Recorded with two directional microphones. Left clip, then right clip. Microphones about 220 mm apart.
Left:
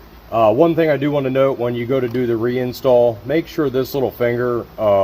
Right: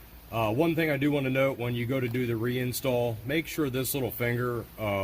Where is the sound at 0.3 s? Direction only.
50° right (ahead or behind).